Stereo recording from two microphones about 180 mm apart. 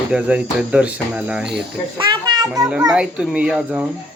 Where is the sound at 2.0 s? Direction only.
25° right (ahead or behind).